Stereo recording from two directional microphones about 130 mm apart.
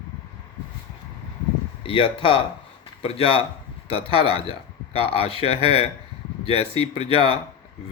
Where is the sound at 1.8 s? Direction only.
40° left (ahead or behind).